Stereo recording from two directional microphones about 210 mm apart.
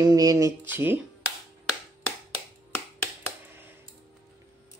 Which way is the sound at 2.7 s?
10° left (ahead or behind).